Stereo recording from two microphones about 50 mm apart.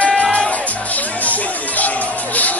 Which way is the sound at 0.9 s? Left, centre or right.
Left.